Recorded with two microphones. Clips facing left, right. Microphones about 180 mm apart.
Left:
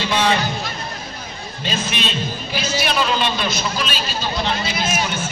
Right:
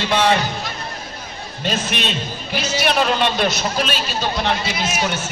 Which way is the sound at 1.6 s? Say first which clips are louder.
Right 2 dB; 60° right (ahead or behind).